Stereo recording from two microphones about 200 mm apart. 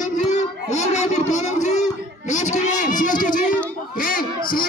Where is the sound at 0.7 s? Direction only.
35° left (ahead or behind).